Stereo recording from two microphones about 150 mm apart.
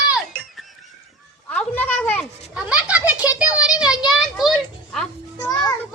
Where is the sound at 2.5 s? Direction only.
5° right (ahead or behind).